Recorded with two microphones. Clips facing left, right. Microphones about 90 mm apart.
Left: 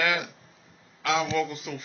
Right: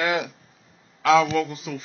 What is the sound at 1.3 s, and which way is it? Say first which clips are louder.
Speech: right 3 dB; 35° right (ahead or behind).